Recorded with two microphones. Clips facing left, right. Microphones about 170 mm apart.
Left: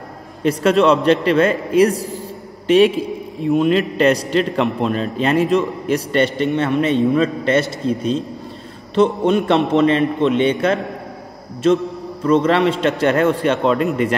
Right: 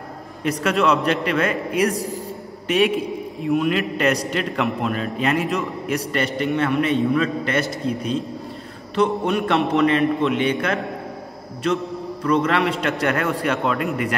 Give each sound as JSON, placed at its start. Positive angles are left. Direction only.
{"t": 0.4, "sound": "a man's voice", "side_deg": 30}